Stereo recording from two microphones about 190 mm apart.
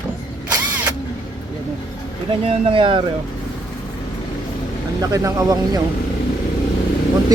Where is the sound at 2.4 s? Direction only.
30° right (ahead or behind).